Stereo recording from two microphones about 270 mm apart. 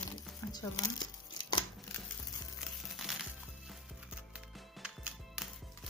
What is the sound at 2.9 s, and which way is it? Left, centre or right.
Music, centre.